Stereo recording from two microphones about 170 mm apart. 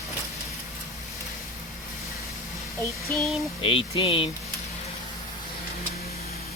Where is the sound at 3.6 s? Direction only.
30° left (ahead or behind).